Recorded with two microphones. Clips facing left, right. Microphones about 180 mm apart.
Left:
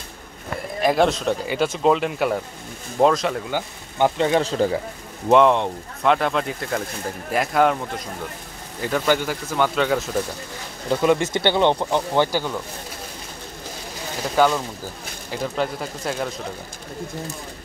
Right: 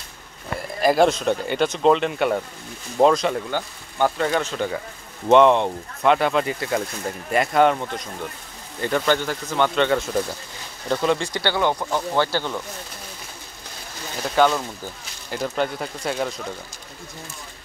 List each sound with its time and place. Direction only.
0.7 s speech: centre (ahead or behind)
3.5 s speech: 20° left (ahead or behind)
4.5 s speech: 35° left (ahead or behind)
5.3 s speech: centre (ahead or behind)
8.8 s speech: 5° left (ahead or behind)
11.1 s speech: 20° left (ahead or behind)
14.3 s speech: 5° left (ahead or behind)